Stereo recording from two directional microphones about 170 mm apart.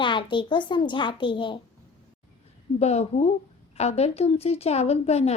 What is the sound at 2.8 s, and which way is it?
A woman's voice, 40° left (ahead or behind).